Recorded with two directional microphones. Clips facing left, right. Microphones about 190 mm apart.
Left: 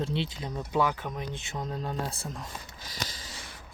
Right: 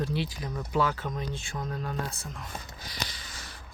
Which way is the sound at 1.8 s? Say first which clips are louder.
Left 1 dB; 25° left (ahead or behind).